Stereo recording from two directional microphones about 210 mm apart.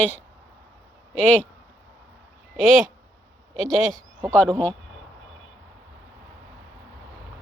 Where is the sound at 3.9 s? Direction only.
15° right (ahead or behind).